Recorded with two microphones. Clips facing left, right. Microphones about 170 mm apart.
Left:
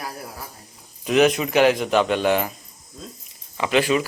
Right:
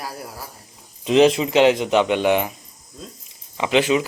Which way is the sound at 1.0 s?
25° right (ahead or behind).